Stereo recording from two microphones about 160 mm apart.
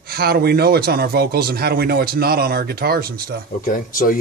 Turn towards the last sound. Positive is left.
turn(degrees=60)  # may be behind; listen again after turning